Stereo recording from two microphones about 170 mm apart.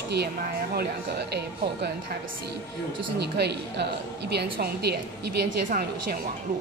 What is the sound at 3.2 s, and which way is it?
Speech, 75° right (ahead or behind).